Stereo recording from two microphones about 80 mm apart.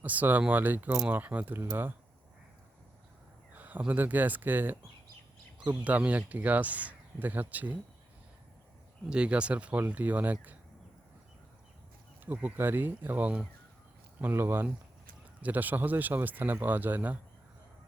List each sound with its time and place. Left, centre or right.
0.0 s speech: centre
3.5 s speech: right
9.0 s speech: centre
12.2 s speech: right